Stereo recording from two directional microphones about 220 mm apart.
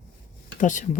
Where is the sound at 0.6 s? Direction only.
35° left (ahead or behind).